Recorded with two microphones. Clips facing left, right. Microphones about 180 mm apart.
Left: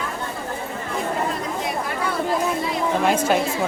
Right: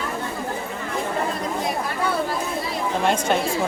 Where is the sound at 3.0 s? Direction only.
5° left (ahead or behind).